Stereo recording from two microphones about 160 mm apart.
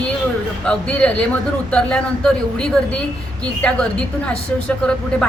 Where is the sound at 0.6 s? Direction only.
5° left (ahead or behind).